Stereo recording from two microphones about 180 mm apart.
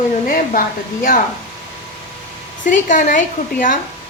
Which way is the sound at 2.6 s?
45° left (ahead or behind).